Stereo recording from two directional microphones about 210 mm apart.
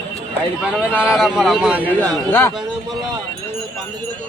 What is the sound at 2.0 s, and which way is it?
Speech, 10° left (ahead or behind).